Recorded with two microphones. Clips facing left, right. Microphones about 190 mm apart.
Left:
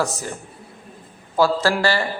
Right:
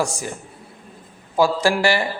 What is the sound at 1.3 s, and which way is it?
Speech, 15° right (ahead or behind).